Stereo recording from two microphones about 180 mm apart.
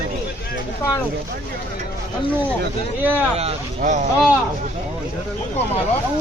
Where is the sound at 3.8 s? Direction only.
45° right (ahead or behind).